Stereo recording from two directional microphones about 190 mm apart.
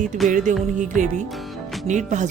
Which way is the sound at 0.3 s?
40° right (ahead or behind).